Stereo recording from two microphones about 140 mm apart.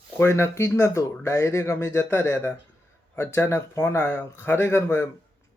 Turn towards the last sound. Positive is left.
turn(degrees=15)  # may be behind; listen again after turning